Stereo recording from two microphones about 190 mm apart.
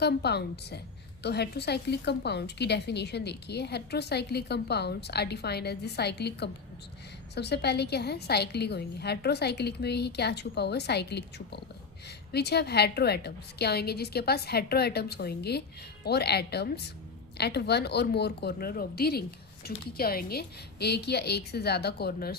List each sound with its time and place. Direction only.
0.0 s a woman's voice: 60° left (ahead or behind)